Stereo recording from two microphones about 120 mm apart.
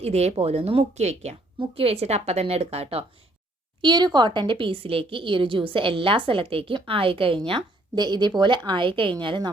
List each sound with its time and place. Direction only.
0.0 s a woman's voice: 60° right (ahead or behind)
1.5 s a woman's voice: 55° right (ahead or behind)
3.8 s a woman's voice: 40° right (ahead or behind)